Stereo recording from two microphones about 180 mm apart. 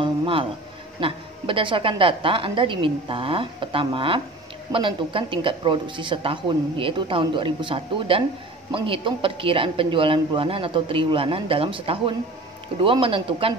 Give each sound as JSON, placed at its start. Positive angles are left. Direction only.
{"t": 0.0, "sound": "music", "side_deg": -30}
{"t": 1.0, "sound": "speech", "side_deg": -30}